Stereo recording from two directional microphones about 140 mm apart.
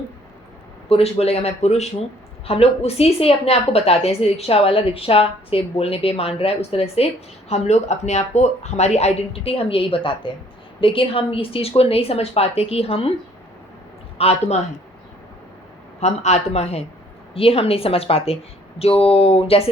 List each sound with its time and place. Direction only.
0.9 s a woman's voice: 45° left (ahead or behind)
14.2 s a woman's voice: 50° left (ahead or behind)
16.0 s a woman's voice: 50° left (ahead or behind)